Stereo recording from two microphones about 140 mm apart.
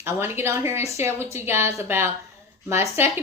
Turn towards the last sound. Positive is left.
turn(degrees=-15)  # may be behind; listen again after turning